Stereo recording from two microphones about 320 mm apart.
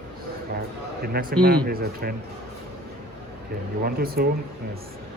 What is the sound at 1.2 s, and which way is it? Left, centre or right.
Speech, right.